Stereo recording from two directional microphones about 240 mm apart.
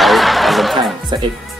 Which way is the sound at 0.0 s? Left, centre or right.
Centre.